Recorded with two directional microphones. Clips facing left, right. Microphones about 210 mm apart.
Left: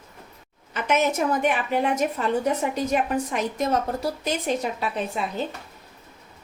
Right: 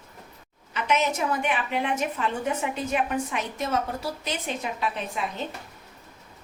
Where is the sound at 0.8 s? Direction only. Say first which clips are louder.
Left 3 dB; 50° left (ahead or behind).